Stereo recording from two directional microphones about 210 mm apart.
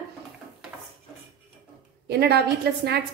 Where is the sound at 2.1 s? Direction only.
50° right (ahead or behind).